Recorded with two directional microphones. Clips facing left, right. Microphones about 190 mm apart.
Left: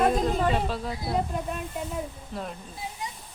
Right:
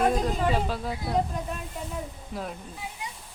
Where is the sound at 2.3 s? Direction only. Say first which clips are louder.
Right 2 dB; centre (ahead or behind).